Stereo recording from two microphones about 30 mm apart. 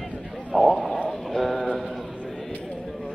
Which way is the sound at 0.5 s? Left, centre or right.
Centre.